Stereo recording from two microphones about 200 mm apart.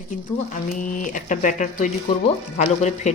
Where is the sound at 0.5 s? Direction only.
40° left (ahead or behind).